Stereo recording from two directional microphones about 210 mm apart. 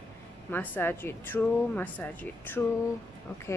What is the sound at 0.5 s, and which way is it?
Speech, 10° left (ahead or behind).